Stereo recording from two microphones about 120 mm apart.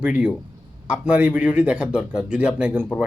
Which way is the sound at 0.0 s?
10° right (ahead or behind).